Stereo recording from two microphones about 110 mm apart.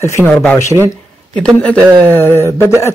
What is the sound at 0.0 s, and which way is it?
Speech, 25° left (ahead or behind).